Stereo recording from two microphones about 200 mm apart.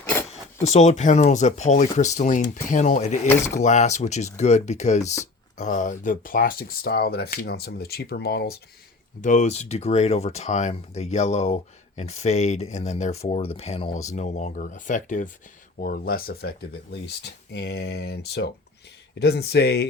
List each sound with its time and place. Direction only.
0.6 s speech: 35° left (ahead or behind)
3.2 s speech: 15° left (ahead or behind)
3.6 s speech: 35° left (ahead or behind); by 8.5 s 50° left (ahead or behind)
9.2 s speech: 40° left (ahead or behind); by 19.9 s 55° left (ahead or behind)